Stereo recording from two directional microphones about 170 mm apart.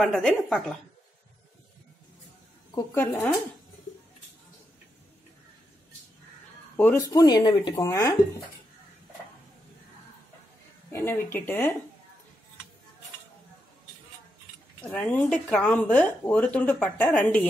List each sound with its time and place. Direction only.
0.0 s a woman's voice: 5° left (ahead or behind)
2.7 s speech: 15° left (ahead or behind)
6.8 s speech: 15° left (ahead or behind)
10.9 s speech: 15° left (ahead or behind)
14.8 s speech: 10° left (ahead or behind)